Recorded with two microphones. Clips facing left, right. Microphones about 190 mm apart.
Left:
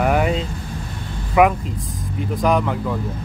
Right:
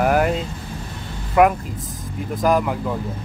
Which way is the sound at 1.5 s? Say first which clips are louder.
Left 1 dB; centre (ahead or behind).